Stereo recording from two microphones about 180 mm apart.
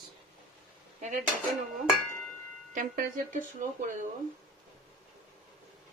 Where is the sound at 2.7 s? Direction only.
50° right (ahead or behind).